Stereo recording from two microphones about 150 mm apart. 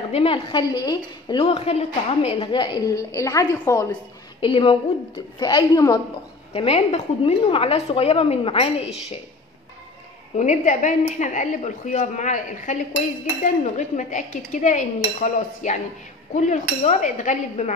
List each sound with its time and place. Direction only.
0.1 s a woman's voice: 35° left (ahead or behind)
1.5 s a woman's voice: 45° left (ahead or behind); by 3.9 s 20° left (ahead or behind)
4.4 s a woman's voice: 35° left (ahead or behind)
6.5 s a woman's voice: 40° left (ahead or behind)
10.3 s a woman's voice: 55° left (ahead or behind)
13.4 s dishes: 55° left (ahead or behind)
16.3 s a woman's voice: 55° left (ahead or behind)